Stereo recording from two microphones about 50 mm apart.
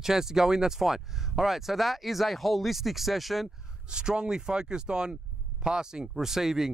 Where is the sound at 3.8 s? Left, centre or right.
Centre.